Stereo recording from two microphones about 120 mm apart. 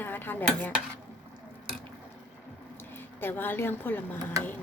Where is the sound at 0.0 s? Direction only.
15° left (ahead or behind).